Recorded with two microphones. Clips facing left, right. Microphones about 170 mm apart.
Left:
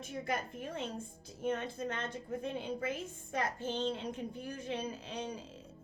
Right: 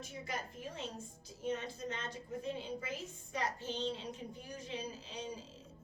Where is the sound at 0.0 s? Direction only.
55° left (ahead or behind).